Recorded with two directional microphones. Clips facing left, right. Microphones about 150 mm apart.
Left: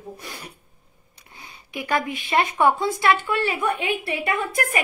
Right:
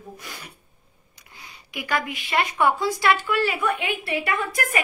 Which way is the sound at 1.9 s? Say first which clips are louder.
Left 3 dB; 25° left (ahead or behind).